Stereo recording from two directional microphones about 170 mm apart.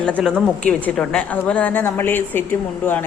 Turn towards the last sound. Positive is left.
turn(degrees=10)  # may be behind; listen again after turning